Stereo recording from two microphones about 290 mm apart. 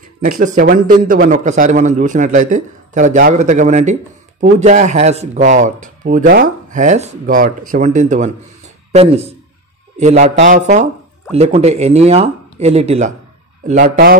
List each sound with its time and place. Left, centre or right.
0.2 s speech: right